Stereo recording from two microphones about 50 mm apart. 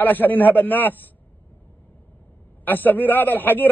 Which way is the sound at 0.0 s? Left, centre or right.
Left.